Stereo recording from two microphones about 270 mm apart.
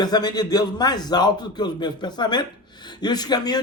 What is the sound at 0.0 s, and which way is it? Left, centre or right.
A man's voice, centre.